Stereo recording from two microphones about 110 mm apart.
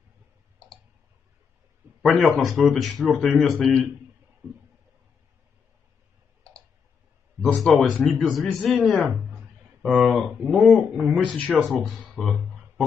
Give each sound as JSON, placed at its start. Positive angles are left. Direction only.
{"t": 1.8, "sound": "a sound", "side_deg": -15}
{"t": 2.1, "sound": "speech", "side_deg": 0}
{"t": 7.6, "sound": "speech", "side_deg": 0}
{"t": 11.4, "sound": "speech", "side_deg": 15}
{"t": 11.8, "sound": "speech", "side_deg": 0}